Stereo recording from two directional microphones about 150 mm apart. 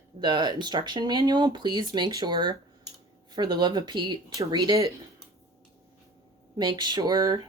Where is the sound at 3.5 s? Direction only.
30° right (ahead or behind).